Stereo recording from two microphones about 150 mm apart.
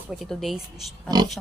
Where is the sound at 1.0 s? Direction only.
25° right (ahead or behind).